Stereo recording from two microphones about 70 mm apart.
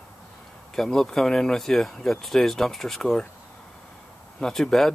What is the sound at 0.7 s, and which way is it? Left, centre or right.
Speech, centre.